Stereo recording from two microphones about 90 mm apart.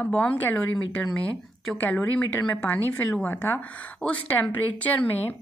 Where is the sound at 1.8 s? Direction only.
20° left (ahead or behind).